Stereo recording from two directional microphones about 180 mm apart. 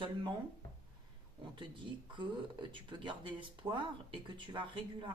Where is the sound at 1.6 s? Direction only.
25° right (ahead or behind).